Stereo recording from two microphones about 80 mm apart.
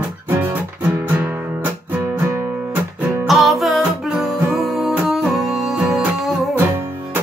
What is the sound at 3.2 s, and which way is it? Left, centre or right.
Music, centre.